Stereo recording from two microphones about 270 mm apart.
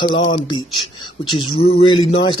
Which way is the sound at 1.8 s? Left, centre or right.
Centre.